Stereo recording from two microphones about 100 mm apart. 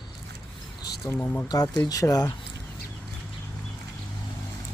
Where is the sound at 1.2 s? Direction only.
15° left (ahead or behind).